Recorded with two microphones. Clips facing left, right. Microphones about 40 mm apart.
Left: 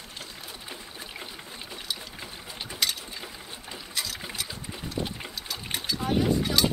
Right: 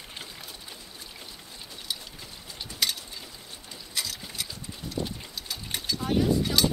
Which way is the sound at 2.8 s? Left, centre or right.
Centre.